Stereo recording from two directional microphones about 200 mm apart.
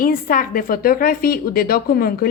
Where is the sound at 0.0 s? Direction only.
45° left (ahead or behind).